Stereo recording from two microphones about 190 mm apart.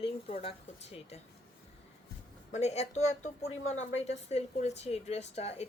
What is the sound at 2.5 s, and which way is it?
Speech, 35° left (ahead or behind).